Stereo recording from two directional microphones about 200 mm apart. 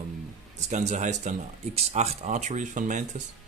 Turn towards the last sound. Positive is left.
turn(degrees=-40)  # may be behind; listen again after turning